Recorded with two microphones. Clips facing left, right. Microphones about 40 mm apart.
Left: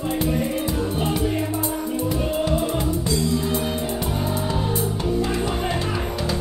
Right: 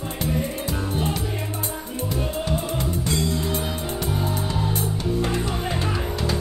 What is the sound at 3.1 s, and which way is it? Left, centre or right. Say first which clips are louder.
Music: left 1 dB; right.